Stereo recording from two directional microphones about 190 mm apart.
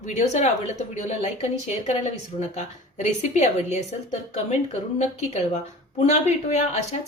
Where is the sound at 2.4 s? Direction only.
40° left (ahead or behind).